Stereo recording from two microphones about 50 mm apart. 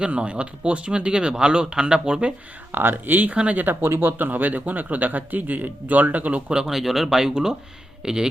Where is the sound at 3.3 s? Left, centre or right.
Right.